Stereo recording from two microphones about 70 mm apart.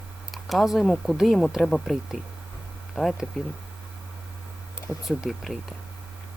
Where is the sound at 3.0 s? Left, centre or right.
Centre.